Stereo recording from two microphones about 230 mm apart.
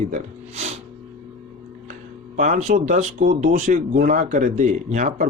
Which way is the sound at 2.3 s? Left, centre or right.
Right.